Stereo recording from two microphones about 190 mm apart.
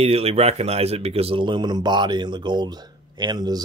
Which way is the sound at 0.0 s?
30° right (ahead or behind).